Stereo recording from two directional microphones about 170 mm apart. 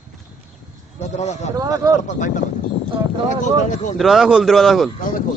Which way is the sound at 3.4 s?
45° left (ahead or behind).